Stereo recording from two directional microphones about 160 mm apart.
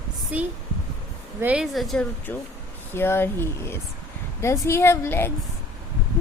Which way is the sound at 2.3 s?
10° left (ahead or behind).